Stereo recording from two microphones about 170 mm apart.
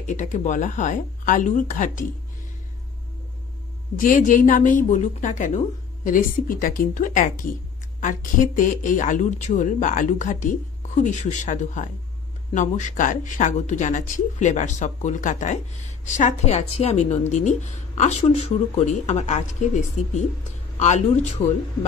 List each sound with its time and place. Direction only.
0.0 s a woman's voice: 45° left (ahead or behind)
4.0 s a woman's voice: 50° left (ahead or behind)